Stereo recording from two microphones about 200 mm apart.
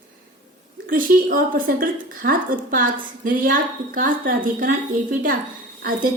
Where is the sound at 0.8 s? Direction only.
45° right (ahead or behind).